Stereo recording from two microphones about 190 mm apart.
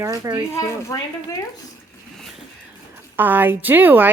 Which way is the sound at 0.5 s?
15° left (ahead or behind).